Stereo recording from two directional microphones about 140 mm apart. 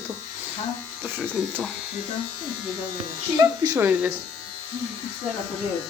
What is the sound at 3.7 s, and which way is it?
Speech, 15° right (ahead or behind).